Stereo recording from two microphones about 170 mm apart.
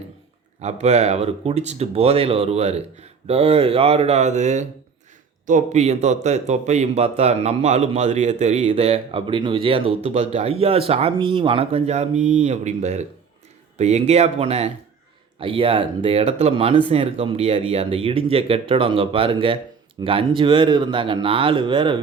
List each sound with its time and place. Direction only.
0.6 s a man's voice: 40° right (ahead or behind)